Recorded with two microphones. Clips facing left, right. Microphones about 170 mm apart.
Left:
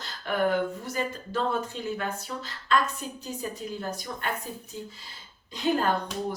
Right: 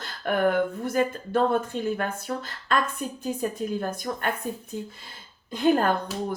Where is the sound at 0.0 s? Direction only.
55° right (ahead or behind).